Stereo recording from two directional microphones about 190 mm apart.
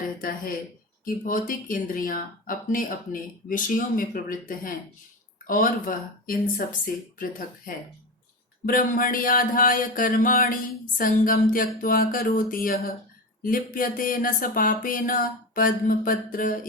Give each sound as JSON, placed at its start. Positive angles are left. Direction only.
{"t": 0.2, "sound": "music", "side_deg": 50}